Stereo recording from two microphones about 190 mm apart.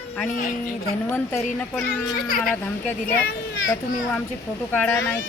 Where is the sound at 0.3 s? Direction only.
45° left (ahead or behind).